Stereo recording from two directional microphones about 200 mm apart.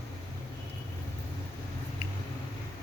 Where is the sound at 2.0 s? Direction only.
30° left (ahead or behind).